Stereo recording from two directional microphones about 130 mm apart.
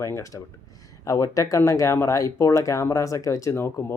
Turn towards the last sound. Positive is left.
turn(degrees=20)  # may be behind; listen again after turning